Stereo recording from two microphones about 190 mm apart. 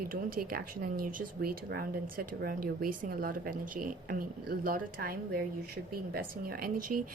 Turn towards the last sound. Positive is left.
turn(degrees=-50)  # may be behind; listen again after turning